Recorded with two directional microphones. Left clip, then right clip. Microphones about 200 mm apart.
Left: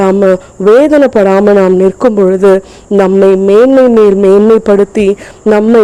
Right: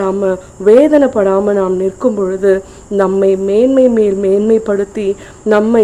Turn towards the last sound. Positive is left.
turn(degrees=35)  # may be behind; listen again after turning